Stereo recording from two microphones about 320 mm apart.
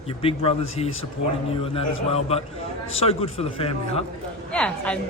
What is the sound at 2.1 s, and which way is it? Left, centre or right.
Speech, centre.